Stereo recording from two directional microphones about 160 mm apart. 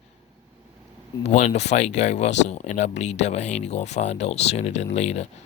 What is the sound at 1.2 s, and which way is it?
Speech, 50° left (ahead or behind).